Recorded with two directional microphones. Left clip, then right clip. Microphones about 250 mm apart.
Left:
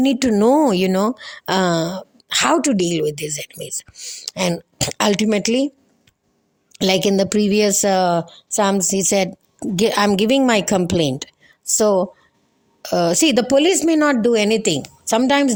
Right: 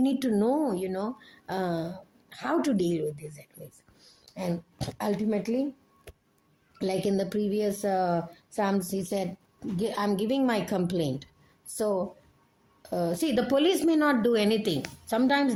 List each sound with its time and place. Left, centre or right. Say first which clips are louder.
0.0 s a woman's voice: left 10 dB; left
6.7 s a woman's voice: left 12 dB; left